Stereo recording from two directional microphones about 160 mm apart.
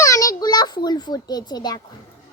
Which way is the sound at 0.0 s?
20° left (ahead or behind).